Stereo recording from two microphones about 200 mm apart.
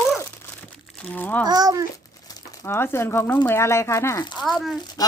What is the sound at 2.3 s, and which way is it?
Speech, 15° left (ahead or behind).